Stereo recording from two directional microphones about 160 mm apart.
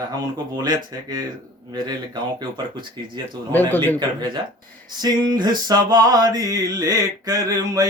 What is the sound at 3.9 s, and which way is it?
Mantra, 25° right (ahead or behind).